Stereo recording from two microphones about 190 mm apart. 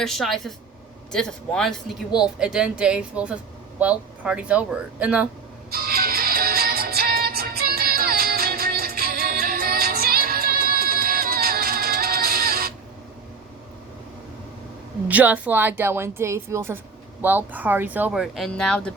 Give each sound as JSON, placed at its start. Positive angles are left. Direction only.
{"t": 0.0, "sound": "a woman's voice", "side_deg": 0}
{"t": 5.7, "sound": "music", "side_deg": -50}
{"t": 15.0, "sound": "speech", "side_deg": -10}